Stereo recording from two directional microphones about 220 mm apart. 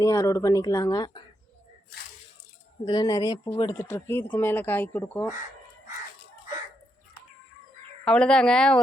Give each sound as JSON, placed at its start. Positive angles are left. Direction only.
{"t": 0.0, "sound": "speech", "side_deg": 15}
{"t": 2.8, "sound": "speech", "side_deg": 20}
{"t": 8.0, "sound": "speech", "side_deg": 5}